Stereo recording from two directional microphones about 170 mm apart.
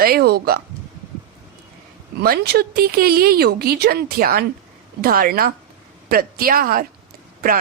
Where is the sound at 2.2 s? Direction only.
65° right (ahead or behind).